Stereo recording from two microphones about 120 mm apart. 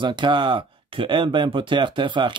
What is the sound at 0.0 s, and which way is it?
Speech, 40° right (ahead or behind).